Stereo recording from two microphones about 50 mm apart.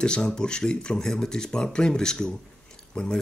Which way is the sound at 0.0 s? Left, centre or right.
Centre.